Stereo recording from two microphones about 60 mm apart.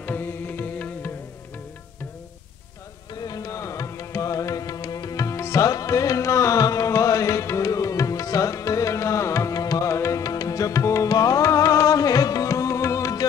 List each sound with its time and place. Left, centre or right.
0.0 s music: left
3.3 s music: left
9.8 s music: left
10.2 s music: left